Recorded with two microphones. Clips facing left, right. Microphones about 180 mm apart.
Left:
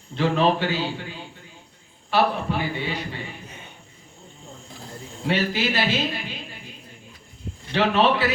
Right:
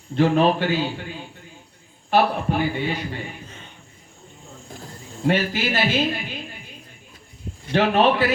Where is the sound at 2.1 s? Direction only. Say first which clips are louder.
Right 2 dB; 50° right (ahead or behind).